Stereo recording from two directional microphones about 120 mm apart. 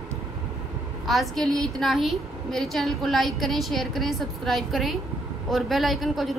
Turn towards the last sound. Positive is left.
turn(degrees=0)  # may be behind; listen again after turning